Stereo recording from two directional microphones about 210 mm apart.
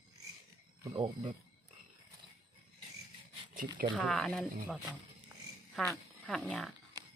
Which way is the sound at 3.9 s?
Centre (ahead or behind).